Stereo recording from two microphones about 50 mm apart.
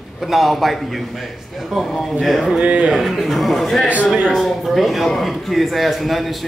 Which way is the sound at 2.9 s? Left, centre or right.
Centre.